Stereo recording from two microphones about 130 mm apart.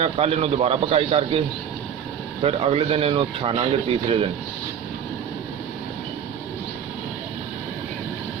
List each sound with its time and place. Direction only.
0.0 s speech: 50° right (ahead or behind)
2.4 s speech: 50° right (ahead or behind)